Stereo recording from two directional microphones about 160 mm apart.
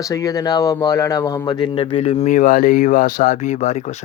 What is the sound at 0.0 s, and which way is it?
Speech, 20° left (ahead or behind).